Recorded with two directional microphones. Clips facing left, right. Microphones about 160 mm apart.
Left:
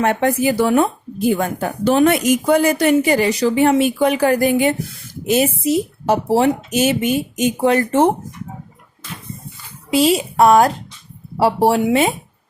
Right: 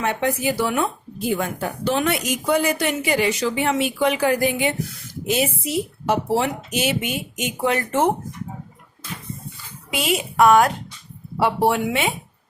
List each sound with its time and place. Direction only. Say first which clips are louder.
0.0 s a woman's voice: left 6 dB; 55° left (ahead or behind); by 8.1 s 35° left (ahead or behind)
9.9 s speech: left 8 dB; 35° left (ahead or behind)